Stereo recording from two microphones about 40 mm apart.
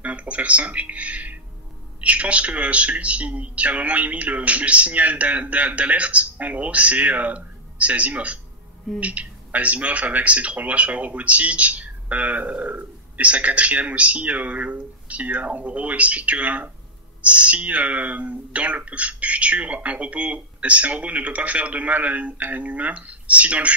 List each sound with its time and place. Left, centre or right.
0.0 s a man's voice: right